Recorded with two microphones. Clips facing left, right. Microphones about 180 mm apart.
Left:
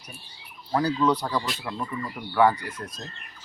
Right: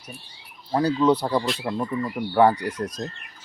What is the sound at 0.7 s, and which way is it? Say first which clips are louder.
Speech: right 3 dB; 25° right (ahead or behind).